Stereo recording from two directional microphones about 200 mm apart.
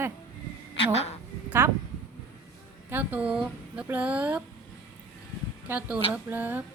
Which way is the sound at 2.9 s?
10° right (ahead or behind).